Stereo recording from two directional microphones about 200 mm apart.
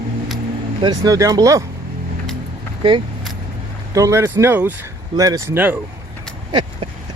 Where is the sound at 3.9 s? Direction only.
15° right (ahead or behind).